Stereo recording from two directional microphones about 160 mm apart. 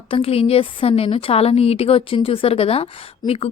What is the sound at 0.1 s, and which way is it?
Speech, 40° left (ahead or behind).